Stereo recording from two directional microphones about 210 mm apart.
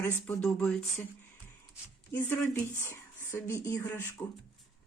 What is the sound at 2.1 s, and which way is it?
Speech, 10° left (ahead or behind).